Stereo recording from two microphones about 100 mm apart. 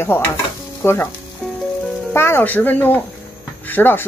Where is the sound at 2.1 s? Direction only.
25° left (ahead or behind).